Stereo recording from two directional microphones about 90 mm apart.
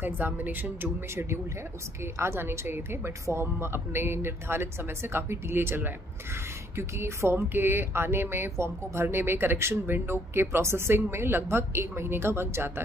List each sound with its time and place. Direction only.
0.0 s speech: 20° right (ahead or behind)
2.1 s speech: 30° right (ahead or behind)